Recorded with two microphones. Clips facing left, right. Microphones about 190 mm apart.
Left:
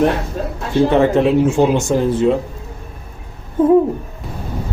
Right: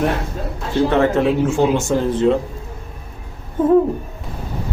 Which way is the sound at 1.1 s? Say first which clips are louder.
Left 3 dB; 15° left (ahead or behind).